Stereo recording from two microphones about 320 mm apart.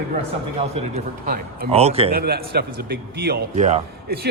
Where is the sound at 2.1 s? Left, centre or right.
Right.